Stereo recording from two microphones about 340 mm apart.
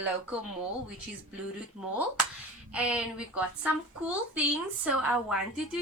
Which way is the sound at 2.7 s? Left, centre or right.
Centre.